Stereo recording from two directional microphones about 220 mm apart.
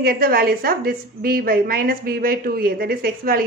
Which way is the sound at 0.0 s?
40° right (ahead or behind).